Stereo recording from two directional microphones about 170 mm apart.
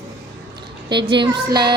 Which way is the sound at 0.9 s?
30° right (ahead or behind).